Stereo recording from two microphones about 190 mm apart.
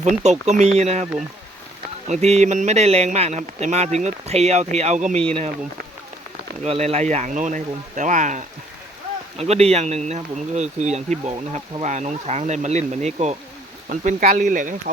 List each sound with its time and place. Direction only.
0.0 s speech: 35° right (ahead or behind)
2.0 s speech: 35° right (ahead or behind)
6.7 s speech: 35° right (ahead or behind)